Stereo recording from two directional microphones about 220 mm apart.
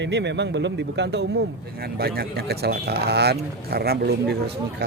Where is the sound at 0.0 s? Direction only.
50° right (ahead or behind).